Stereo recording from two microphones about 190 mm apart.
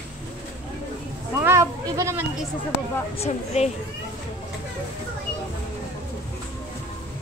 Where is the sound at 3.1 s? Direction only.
35° left (ahead or behind).